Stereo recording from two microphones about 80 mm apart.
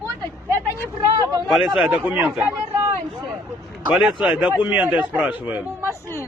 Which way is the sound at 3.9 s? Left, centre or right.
Centre.